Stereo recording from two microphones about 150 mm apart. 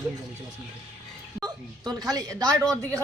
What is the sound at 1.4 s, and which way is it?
Speech, 25° right (ahead or behind).